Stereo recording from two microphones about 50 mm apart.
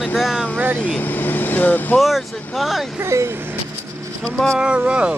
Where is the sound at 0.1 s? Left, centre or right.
Centre.